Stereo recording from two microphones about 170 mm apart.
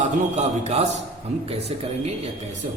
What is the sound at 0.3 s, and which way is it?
A man's voice, 40° right (ahead or behind).